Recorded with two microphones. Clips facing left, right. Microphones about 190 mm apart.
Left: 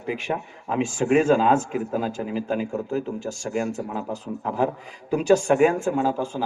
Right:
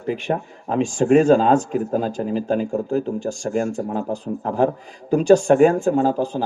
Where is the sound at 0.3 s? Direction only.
40° right (ahead or behind).